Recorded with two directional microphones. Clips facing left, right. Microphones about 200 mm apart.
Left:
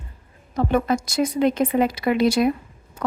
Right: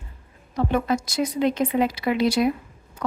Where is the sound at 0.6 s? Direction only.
50° left (ahead or behind).